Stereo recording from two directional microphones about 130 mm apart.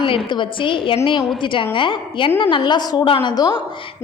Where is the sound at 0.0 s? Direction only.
40° left (ahead or behind).